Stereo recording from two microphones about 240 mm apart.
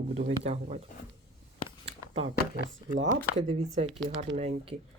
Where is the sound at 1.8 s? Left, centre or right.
Right.